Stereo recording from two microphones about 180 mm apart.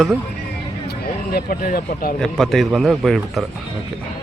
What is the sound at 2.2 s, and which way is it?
A man's voice, centre (ahead or behind).